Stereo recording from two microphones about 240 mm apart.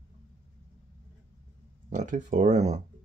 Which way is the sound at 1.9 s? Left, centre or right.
Right.